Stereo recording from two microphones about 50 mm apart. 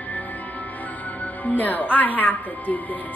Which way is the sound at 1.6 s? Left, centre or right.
Left.